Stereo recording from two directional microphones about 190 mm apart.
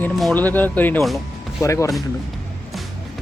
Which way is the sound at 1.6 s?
15° left (ahead or behind).